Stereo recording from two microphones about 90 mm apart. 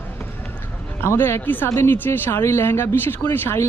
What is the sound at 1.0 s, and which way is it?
Speech, 25° left (ahead or behind).